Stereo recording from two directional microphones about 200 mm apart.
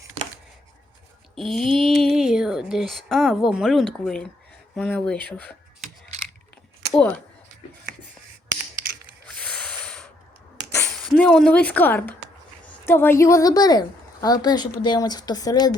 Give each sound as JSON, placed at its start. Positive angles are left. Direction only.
{"t": 1.4, "sound": "speech", "side_deg": 0}
{"t": 9.3, "sound": "a sound", "side_deg": 5}
{"t": 11.1, "sound": "a woman's voice", "side_deg": 0}